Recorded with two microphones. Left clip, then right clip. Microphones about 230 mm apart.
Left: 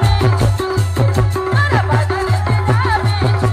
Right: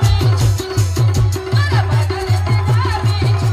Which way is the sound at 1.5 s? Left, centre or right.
Centre.